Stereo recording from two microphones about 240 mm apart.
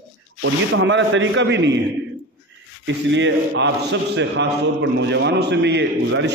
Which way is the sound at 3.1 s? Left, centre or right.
Right.